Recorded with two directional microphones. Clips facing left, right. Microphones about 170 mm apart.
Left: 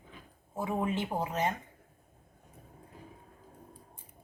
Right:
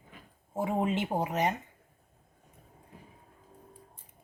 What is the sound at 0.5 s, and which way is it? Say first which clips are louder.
Speech: right 3 dB; 20° right (ahead or behind).